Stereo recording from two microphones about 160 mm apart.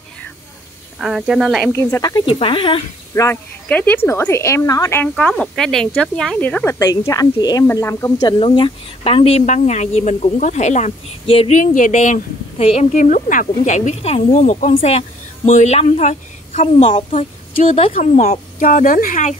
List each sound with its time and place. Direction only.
0.9 s speech: 5° right (ahead or behind)
1.7 s speech: 15° left (ahead or behind); by 2.8 s 30° left (ahead or behind)
3.2 s speech: 15° left (ahead or behind); by 12.8 s 40° left (ahead or behind)
12.9 s speech: 55° left (ahead or behind); by 17.9 s 40° left (ahead or behind)
17.9 s speech: 50° left (ahead or behind)